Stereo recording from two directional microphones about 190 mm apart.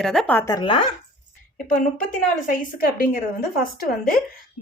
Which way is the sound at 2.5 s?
45° left (ahead or behind).